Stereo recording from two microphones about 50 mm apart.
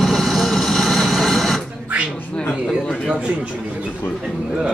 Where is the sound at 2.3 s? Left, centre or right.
Centre.